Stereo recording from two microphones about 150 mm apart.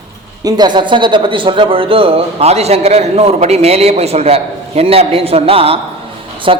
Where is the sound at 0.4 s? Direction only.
30° right (ahead or behind).